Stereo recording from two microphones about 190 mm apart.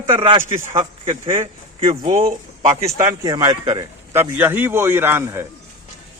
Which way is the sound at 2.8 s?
20° right (ahead or behind).